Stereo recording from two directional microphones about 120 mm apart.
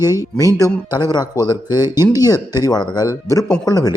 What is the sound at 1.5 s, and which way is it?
Speech, 35° left (ahead or behind).